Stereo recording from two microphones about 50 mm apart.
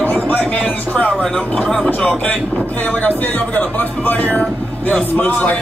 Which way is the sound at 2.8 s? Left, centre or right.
Left.